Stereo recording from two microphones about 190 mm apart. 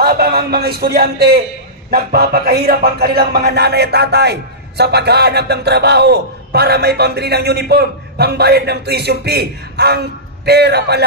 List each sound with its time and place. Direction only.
0.0 s a man's voice: 55° right (ahead or behind)